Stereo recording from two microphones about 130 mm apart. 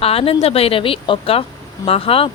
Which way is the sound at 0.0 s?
50° left (ahead or behind).